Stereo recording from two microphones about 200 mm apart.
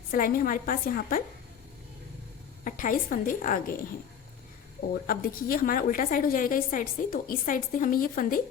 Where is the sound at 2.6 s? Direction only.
40° left (ahead or behind).